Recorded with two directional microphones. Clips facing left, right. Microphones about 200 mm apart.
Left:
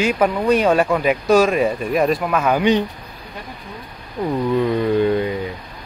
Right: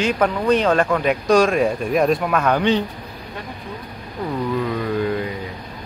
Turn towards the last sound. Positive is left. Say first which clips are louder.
# left 5 dB
turn(degrees=25)  # may be behind; listen again after turning